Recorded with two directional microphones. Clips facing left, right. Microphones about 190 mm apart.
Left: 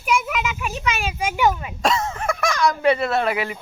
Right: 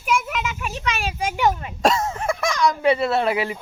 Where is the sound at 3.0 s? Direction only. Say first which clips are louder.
Right 1 dB; 30° right (ahead or behind).